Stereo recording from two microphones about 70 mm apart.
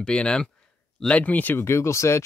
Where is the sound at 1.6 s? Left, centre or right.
Left.